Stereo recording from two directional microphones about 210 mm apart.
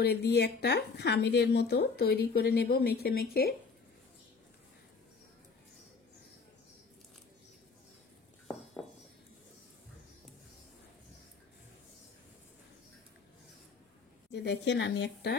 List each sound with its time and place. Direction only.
0.0 s speech: 50° left (ahead or behind)
14.3 s speech: 55° left (ahead or behind)